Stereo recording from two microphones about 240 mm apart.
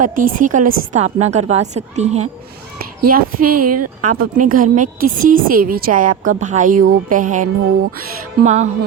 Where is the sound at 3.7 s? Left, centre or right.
Right.